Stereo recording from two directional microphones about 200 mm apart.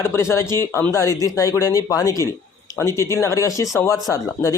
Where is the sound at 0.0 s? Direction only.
10° left (ahead or behind).